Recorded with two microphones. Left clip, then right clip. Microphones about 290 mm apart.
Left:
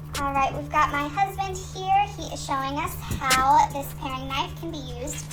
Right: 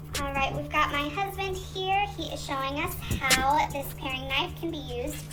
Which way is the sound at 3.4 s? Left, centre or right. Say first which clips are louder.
Left 6 dB; left.